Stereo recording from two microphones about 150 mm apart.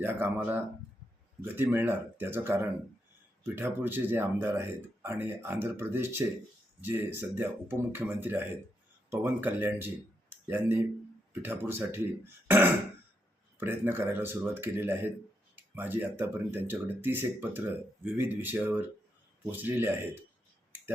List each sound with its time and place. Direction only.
0.0 s speech: 15° right (ahead or behind)
1.5 s speech: 15° right (ahead or behind)